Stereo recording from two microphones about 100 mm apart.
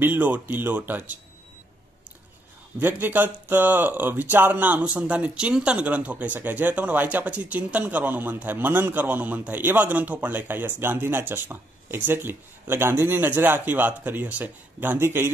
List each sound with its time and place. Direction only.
0.0 s speech: 15° right (ahead or behind)
2.8 s speech: 20° right (ahead or behind)